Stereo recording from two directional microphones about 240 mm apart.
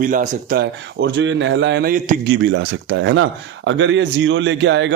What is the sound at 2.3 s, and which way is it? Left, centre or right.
Speech, right.